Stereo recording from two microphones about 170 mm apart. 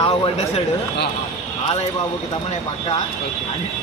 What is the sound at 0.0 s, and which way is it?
Speech, 35° left (ahead or behind).